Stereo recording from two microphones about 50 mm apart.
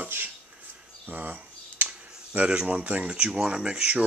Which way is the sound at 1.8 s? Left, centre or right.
Right.